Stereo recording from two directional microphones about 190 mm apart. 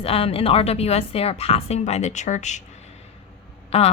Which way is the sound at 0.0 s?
30° left (ahead or behind).